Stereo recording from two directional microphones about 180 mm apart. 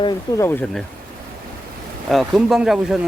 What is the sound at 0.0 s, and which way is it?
Speech, 15° left (ahead or behind).